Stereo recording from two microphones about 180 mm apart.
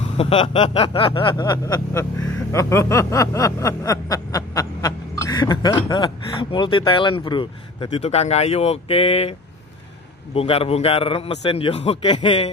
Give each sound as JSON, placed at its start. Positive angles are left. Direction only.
{"t": 0.2, "sound": "snicker", "side_deg": 30}
{"t": 10.3, "sound": "a man's voice", "side_deg": 30}